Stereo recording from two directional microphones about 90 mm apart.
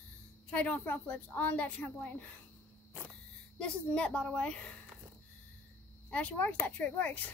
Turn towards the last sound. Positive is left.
turn(degrees=20)  # may be behind; listen again after turning